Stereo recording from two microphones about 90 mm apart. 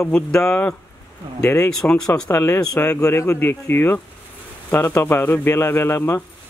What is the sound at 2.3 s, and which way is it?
Speech, 30° left (ahead or behind).